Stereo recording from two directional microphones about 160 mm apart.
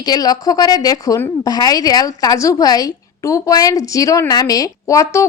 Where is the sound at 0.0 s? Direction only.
25° left (ahead or behind).